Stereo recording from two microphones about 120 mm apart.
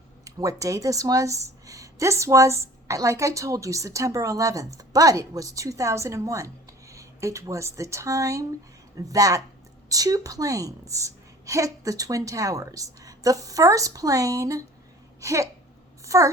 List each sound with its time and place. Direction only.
0.3 s speech: 30° right (ahead or behind)
15.2 s a sound: 25° right (ahead or behind)
16.0 s speech: 25° right (ahead or behind)